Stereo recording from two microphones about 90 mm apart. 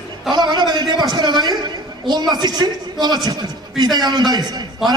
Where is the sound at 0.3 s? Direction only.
55° right (ahead or behind).